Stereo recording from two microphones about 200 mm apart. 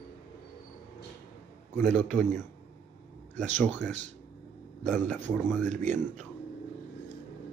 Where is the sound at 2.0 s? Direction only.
35° right (ahead or behind).